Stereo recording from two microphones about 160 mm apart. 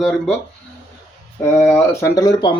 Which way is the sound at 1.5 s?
10° left (ahead or behind).